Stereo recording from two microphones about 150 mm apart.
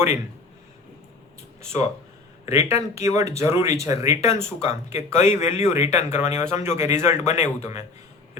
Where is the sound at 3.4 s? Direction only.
20° right (ahead or behind).